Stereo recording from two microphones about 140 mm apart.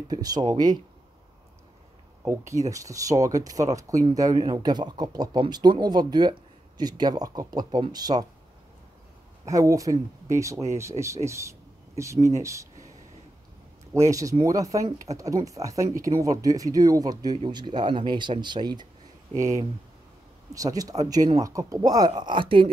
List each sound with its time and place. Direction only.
0.1 s speech: 30° right (ahead or behind)
2.2 s speech: 20° right (ahead or behind)
9.5 s speech: 25° right (ahead or behind)
13.9 s speech: 20° right (ahead or behind); by 22.7 s 35° right (ahead or behind)